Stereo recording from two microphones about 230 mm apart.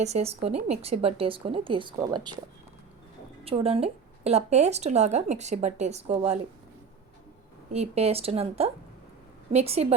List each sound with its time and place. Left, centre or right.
0.0 s a woman's voice: right
3.4 s a woman's voice: right
7.7 s a woman's voice: right